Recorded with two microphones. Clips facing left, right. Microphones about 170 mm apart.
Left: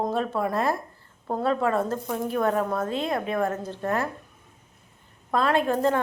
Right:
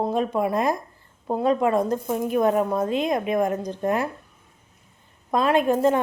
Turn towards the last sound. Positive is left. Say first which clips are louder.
# right 3 dB
turn(degrees=-15)  # may be behind; listen again after turning